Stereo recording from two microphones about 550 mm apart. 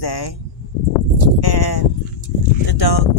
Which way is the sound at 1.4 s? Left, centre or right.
Left.